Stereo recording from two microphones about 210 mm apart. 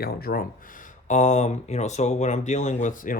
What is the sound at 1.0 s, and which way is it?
Speech, 35° left (ahead or behind).